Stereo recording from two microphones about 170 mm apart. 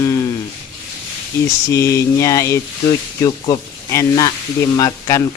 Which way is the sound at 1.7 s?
15° left (ahead or behind).